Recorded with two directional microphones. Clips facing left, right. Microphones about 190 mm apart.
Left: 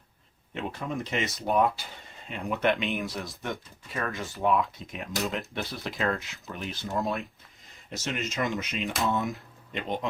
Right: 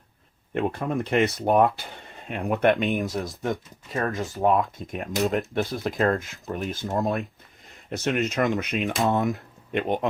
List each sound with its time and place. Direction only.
0.5 s speech: 55° right (ahead or behind)